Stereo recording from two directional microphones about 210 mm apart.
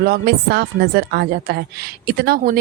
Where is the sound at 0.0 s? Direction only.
45° right (ahead or behind).